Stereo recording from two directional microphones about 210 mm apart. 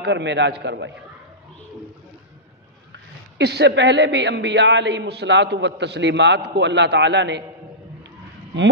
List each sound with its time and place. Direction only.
0.0 s a woman's voice: 55° right (ahead or behind)
2.9 s a woman's voice: 55° right (ahead or behind)